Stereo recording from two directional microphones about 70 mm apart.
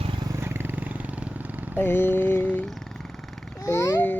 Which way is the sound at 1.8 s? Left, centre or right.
Left.